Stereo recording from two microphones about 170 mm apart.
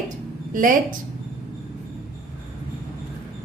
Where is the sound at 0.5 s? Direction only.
50° right (ahead or behind).